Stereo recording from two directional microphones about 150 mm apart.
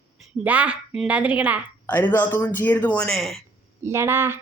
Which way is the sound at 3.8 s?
15° right (ahead or behind).